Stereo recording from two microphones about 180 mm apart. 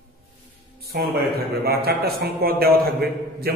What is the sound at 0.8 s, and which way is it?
A man's voice, 60° right (ahead or behind).